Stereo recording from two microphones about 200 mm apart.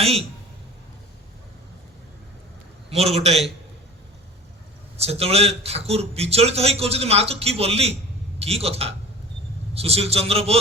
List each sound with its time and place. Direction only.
0.0 s a man's voice: 30° right (ahead or behind)
3.2 s speech: 30° right (ahead or behind)
4.9 s speech: 30° right (ahead or behind)